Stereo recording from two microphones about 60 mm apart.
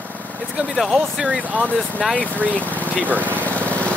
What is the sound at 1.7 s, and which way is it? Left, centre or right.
Speech, centre.